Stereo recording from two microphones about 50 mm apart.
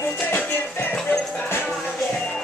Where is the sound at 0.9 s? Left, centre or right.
Centre.